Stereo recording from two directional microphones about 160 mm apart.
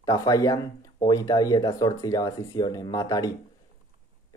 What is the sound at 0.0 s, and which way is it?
Speech, 25° left (ahead or behind).